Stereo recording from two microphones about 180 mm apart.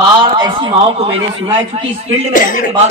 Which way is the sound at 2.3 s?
50° left (ahead or behind).